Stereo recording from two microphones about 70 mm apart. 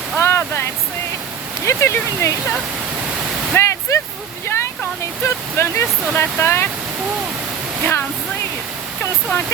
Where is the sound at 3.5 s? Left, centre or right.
Left.